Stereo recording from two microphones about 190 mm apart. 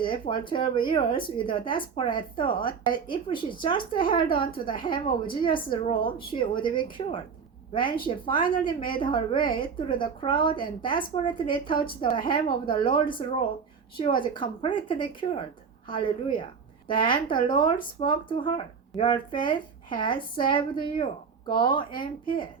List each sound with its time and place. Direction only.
0.0 s speech: 25° left (ahead or behind)
15.9 s speech: 25° left (ahead or behind)